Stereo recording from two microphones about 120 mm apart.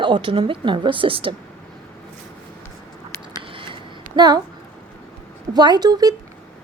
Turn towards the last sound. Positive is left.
turn(degrees=-35)  # may be behind; listen again after turning